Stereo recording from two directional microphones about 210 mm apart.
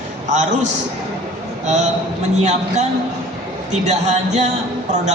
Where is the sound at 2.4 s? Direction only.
35° right (ahead or behind).